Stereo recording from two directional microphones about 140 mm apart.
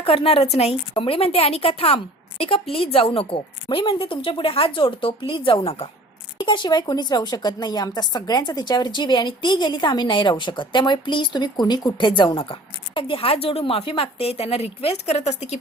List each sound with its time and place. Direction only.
0.0 s a woman's voice: 40° left (ahead or behind)